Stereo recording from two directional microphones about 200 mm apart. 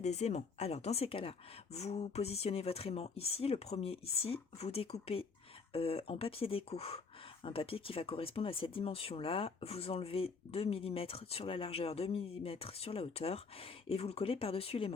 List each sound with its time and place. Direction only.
0.0 s speech: 35° left (ahead or behind)